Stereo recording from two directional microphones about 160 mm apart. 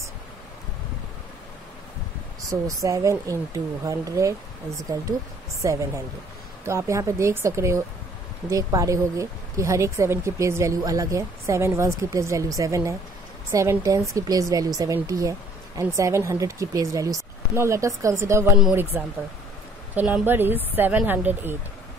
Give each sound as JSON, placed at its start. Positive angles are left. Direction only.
{"t": 2.5, "sound": "a woman's voice", "side_deg": -20}